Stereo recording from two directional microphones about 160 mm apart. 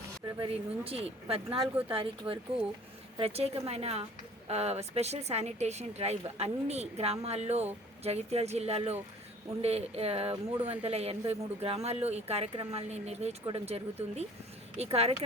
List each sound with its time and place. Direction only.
0.3 s speech: 35° right (ahead or behind)